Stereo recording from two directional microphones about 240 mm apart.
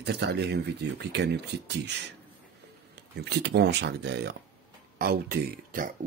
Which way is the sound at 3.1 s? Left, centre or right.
Right.